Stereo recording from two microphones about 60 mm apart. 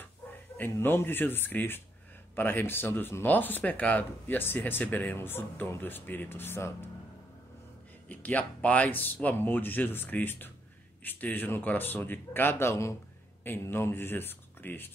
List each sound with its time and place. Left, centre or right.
0.7 s speech: left
8.1 s speech: left